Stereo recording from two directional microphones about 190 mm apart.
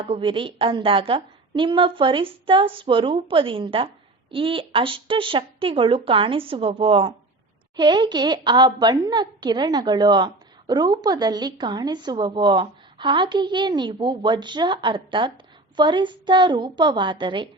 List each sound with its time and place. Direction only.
0.0 s a woman's voice: 30° right (ahead or behind)